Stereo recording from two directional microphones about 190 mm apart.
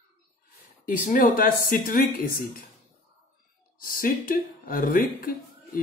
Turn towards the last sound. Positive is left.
turn(degrees=50)  # may be behind; listen again after turning